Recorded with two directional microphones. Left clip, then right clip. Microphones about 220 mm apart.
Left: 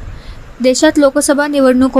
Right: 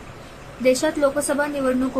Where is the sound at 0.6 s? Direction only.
35° left (ahead or behind).